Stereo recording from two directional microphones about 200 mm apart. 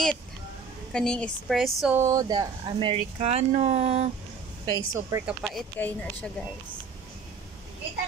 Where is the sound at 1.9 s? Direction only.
15° right (ahead or behind); by 4.0 s 35° right (ahead or behind).